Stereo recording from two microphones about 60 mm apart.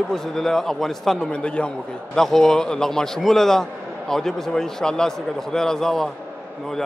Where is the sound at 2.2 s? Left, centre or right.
Centre.